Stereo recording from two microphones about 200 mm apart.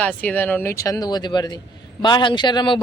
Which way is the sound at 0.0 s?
5° left (ahead or behind).